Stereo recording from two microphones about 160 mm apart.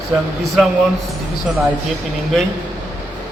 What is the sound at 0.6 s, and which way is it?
Speech, 5° right (ahead or behind).